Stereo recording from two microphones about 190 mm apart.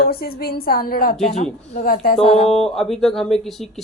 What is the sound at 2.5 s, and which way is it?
Speech, centre (ahead or behind).